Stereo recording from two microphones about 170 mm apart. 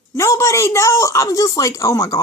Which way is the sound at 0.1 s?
20° left (ahead or behind).